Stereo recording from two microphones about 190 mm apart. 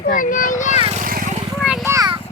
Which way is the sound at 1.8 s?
15° right (ahead or behind).